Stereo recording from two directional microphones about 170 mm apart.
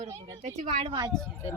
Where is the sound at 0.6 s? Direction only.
40° right (ahead or behind).